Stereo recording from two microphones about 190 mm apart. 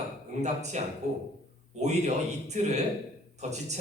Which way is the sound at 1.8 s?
35° right (ahead or behind).